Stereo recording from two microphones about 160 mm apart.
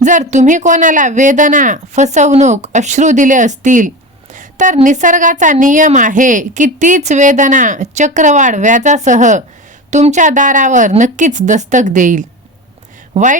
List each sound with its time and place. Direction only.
0.0 s speech: 50° right (ahead or behind)
13.1 s speech: 40° right (ahead or behind)